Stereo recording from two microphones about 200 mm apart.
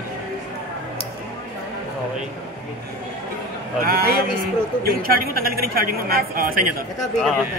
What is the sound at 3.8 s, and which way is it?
A man's voice, 50° right (ahead or behind).